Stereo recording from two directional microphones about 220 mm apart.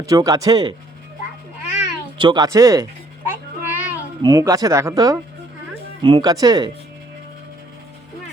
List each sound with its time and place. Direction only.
0.0 s speech: 15° right (ahead or behind)
2.1 s speech: 20° right (ahead or behind)
3.2 s child singing: 10° right (ahead or behind)
4.2 s speech: 15° right (ahead or behind)